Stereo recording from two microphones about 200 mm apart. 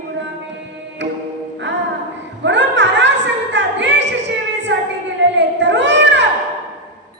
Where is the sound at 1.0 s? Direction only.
60° right (ahead or behind).